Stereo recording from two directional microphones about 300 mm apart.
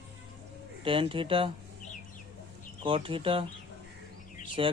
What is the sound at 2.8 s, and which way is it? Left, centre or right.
Speech, centre.